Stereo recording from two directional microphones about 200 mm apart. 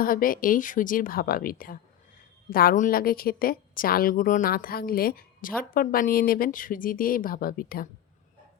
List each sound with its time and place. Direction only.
0.0 s a woman's voice: 45° left (ahead or behind)